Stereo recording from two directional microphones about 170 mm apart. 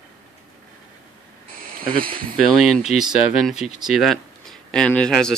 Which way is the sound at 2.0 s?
55° right (ahead or behind).